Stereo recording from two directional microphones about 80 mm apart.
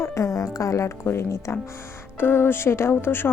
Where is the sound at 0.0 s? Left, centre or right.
Left.